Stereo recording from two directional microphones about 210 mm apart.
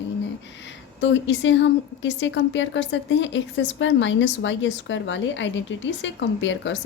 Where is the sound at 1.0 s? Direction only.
60° left (ahead or behind).